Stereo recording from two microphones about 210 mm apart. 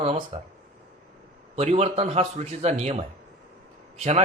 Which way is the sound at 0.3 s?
30° right (ahead or behind).